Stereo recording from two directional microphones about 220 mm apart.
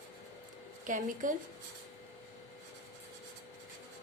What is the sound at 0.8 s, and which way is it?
Speech, 35° right (ahead or behind).